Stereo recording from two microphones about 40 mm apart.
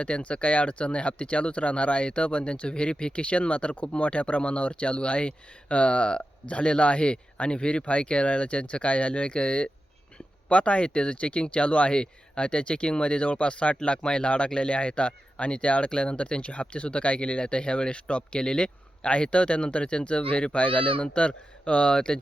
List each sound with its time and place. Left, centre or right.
0.0 s speech: left